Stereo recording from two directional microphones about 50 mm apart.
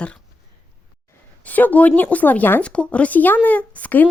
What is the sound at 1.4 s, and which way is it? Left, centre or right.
Speech, left.